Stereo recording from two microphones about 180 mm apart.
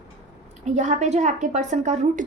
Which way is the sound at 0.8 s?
40° right (ahead or behind).